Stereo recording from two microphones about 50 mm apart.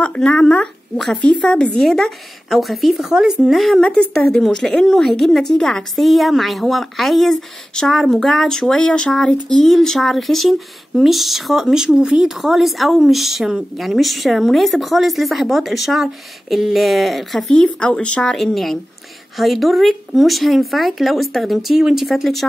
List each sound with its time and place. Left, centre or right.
0.0 s speech: left
0.9 s speech: centre
1.2 s speech: centre
3.5 s speech: centre
3.8 s speech: centre
17.6 s speech: centre
18.3 s speech: centre